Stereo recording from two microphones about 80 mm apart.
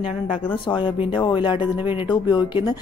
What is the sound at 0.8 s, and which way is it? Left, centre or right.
Speech, left.